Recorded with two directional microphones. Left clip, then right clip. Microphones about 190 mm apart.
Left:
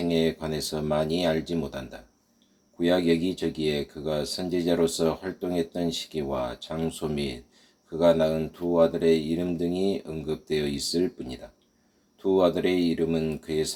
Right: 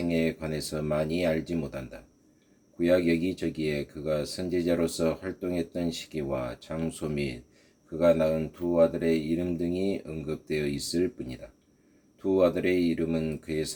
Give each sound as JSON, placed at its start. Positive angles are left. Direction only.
{"t": 0.1, "sound": "speech", "side_deg": -40}
{"t": 2.8, "sound": "speech", "side_deg": -40}
{"t": 12.2, "sound": "speech", "side_deg": -40}